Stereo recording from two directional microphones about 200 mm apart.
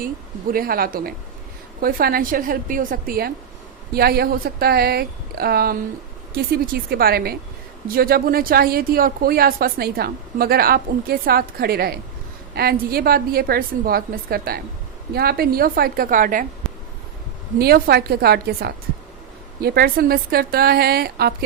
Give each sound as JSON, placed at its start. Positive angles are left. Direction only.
{"t": 0.5, "sound": "speech", "side_deg": -45}
{"t": 17.6, "sound": "speech", "side_deg": -50}